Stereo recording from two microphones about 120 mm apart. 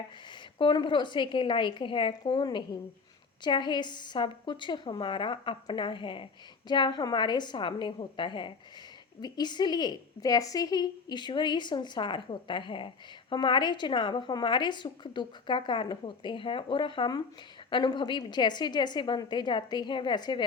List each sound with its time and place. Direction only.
0.3 s a woman's voice: 40° left (ahead or behind)